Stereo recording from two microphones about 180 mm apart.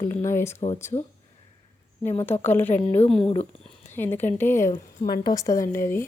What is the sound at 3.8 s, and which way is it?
Speech, 10° left (ahead or behind).